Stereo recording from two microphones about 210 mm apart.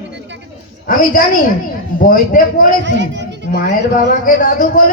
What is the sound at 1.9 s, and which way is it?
Speech, 40° left (ahead or behind).